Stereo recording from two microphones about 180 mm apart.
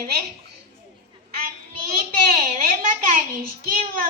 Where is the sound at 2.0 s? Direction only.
55° right (ahead or behind).